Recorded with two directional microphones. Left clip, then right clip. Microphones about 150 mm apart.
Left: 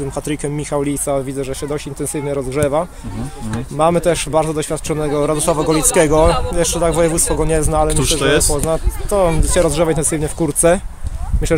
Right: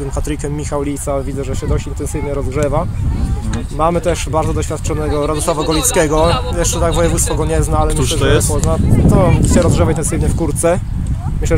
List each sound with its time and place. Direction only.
0.7 s speech: 25° left (ahead or behind)
7.9 s speech: 5° right (ahead or behind)
8.6 s speech: 30° left (ahead or behind)